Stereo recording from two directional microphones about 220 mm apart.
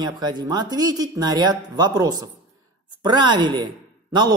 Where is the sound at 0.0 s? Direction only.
20° right (ahead or behind).